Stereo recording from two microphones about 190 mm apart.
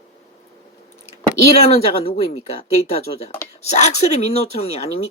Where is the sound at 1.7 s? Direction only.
35° left (ahead or behind).